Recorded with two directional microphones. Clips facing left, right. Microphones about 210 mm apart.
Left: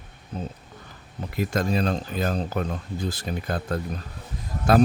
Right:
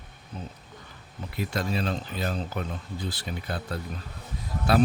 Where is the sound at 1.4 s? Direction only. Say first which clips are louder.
Left 5 dB; 45° left (ahead or behind).